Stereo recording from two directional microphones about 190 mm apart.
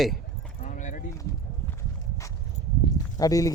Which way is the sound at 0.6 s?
40° left (ahead or behind).